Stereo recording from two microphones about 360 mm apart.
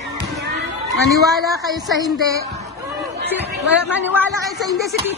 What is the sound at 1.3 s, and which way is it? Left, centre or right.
Speech, centre.